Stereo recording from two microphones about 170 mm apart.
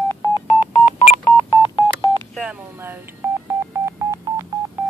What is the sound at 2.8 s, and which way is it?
Telephone dialing, 15° right (ahead or behind).